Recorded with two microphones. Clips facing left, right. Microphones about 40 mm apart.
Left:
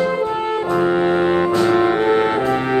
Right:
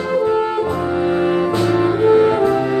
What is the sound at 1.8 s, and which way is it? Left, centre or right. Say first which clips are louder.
Music: right 3 dB; left.